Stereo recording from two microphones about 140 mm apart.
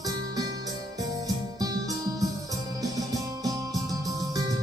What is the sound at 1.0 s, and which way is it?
Music, 25° right (ahead or behind).